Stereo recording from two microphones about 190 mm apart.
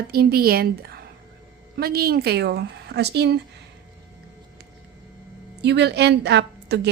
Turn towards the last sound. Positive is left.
turn(degrees=-65)  # may be behind; listen again after turning